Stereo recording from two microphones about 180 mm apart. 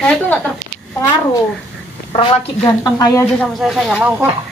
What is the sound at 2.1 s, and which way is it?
Speech, 30° left (ahead or behind).